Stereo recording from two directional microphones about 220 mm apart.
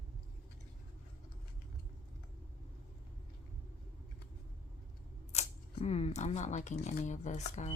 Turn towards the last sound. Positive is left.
turn(degrees=30)  # may be behind; listen again after turning